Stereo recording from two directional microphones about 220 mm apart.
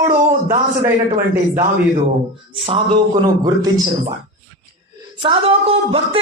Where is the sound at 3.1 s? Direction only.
15° right (ahead or behind).